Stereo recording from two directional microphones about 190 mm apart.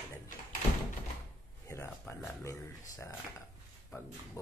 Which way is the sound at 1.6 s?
15° left (ahead or behind).